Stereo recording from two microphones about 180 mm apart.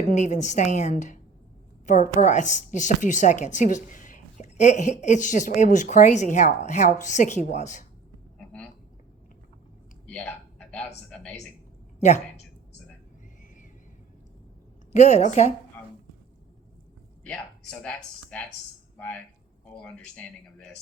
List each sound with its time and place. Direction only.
0.1 s a woman's voice: 40° left (ahead or behind)
8.4 s a sound: 5° left (ahead or behind)
10.1 s speech: 10° left (ahead or behind)
11.9 s speech: 40° left (ahead or behind)
14.9 s a woman's voice: 40° left (ahead or behind)
17.2 s speech: 5° left (ahead or behind)